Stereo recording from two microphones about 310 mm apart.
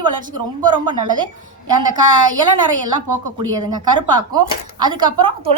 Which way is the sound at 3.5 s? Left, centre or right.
Centre.